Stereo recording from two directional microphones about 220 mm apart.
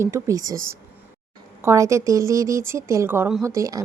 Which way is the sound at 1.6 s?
15° right (ahead or behind).